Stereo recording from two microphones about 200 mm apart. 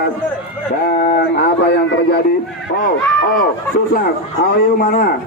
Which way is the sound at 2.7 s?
50° left (ahead or behind).